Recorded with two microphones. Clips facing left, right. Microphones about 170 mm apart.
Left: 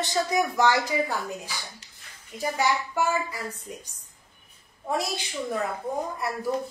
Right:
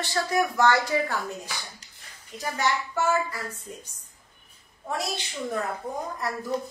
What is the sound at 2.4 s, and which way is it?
Speech, 10° left (ahead or behind).